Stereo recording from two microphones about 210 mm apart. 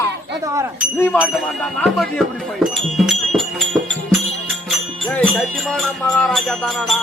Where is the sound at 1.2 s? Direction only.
5° left (ahead or behind).